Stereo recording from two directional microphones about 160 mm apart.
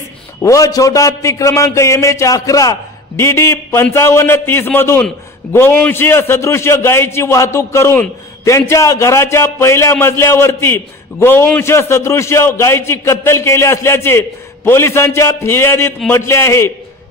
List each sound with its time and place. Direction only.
0.4 s a man's voice: 20° left (ahead or behind)